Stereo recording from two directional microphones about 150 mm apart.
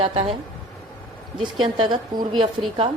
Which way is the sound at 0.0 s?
40° right (ahead or behind).